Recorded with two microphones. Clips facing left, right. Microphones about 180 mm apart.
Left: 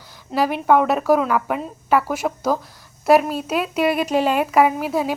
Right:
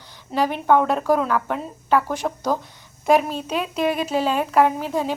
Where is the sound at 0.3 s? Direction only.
5° left (ahead or behind).